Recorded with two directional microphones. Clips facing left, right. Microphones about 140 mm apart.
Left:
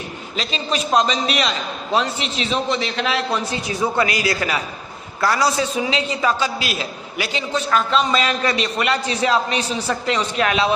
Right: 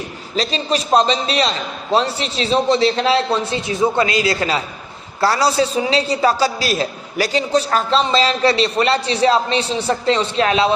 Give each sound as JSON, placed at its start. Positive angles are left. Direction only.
{"t": 0.3, "sound": "a man's voice", "side_deg": -35}